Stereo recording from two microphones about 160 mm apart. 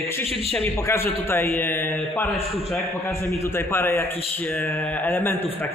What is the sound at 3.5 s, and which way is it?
A man's voice, 15° left (ahead or behind).